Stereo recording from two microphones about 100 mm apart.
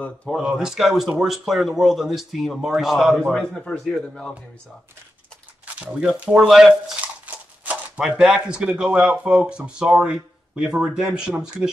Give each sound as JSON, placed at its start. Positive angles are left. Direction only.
{"t": 0.0, "sound": "speech", "side_deg": 15}
{"t": 0.4, "sound": "speech", "side_deg": -5}
{"t": 5.9, "sound": "speech", "side_deg": -10}
{"t": 7.2, "sound": "a sound", "side_deg": -15}
{"t": 8.0, "sound": "speech", "side_deg": -5}